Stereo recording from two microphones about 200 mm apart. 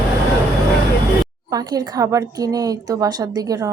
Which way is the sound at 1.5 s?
15° right (ahead or behind).